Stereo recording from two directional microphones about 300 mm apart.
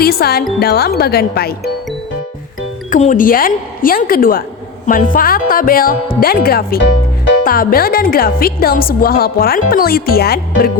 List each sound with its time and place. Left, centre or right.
0.0 s speech: left
2.9 s speech: left